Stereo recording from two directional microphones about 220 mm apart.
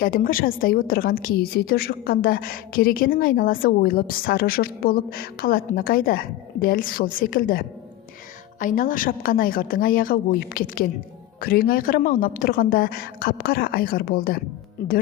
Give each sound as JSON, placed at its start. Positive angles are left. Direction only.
{"t": 0.0, "sound": "a woman's voice", "side_deg": 40}